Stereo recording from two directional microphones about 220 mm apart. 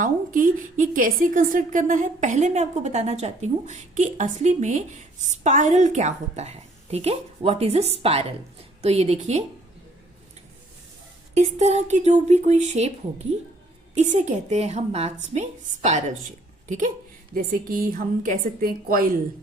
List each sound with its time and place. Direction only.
0.0 s a woman's voice: 40° right (ahead or behind)
11.3 s a woman's voice: 30° right (ahead or behind)